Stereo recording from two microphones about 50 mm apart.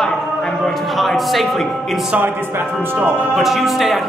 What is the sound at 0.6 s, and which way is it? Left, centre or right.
A man's voice, centre.